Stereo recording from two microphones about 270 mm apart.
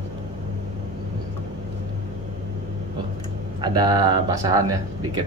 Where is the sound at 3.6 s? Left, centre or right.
Centre.